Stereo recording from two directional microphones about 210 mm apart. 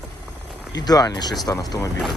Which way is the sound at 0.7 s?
20° left (ahead or behind).